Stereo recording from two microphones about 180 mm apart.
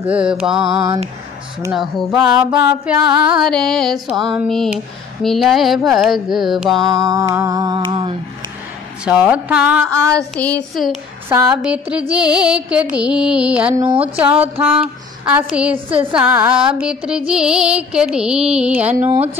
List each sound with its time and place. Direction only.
0.0 s music: 5° right (ahead or behind)
0.7 s mantra: 20° right (ahead or behind)
1.7 s music: centre (ahead or behind)
2.2 s speech: 5° right (ahead or behind)
3.3 s music: centre (ahead or behind)
6.8 s mantra: 20° right (ahead or behind)
9.0 s speech: 5° right (ahead or behind)
10.1 s a sound: 5° left (ahead or behind)
10.8 s music: centre (ahead or behind)
11.2 s speech: 10° right (ahead or behind)
12.1 s music: 5° right (ahead or behind)
13.9 s speech: 10° right (ahead or behind)
15.7 s mantra: 30° right (ahead or behind)
16.1 s music: 5° right (ahead or behind)